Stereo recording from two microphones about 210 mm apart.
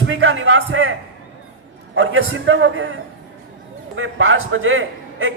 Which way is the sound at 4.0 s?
70° right (ahead or behind).